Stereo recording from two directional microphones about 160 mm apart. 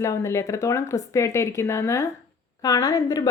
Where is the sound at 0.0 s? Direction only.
20° left (ahead or behind).